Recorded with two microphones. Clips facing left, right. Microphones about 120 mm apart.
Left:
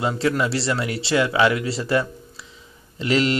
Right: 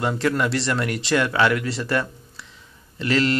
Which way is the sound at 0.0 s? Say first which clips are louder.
Even; 10° left (ahead or behind).